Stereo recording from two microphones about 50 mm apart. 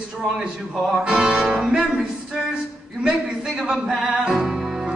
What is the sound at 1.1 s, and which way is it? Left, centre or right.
Music, right.